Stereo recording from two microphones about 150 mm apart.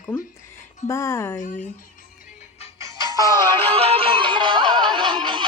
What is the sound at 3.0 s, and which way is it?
Music, 25° left (ahead or behind).